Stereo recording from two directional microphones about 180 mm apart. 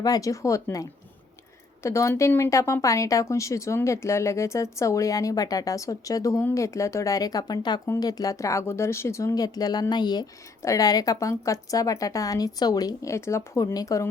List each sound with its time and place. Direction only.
0.0 s speech: 20° left (ahead or behind)